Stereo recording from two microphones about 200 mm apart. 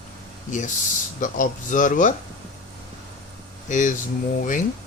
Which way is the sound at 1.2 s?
40° left (ahead or behind).